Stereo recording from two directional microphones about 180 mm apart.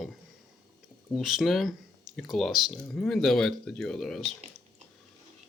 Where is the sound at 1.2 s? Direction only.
Centre (ahead or behind).